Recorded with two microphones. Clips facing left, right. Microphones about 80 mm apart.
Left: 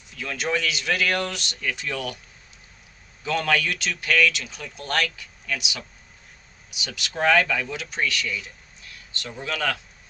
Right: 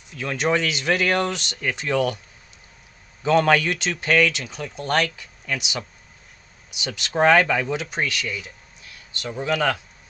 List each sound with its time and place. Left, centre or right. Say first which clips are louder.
0.2 s speech: right 4 dB; right
3.2 s speech: right 6 dB; right
6.8 s speech: right 5 dB; right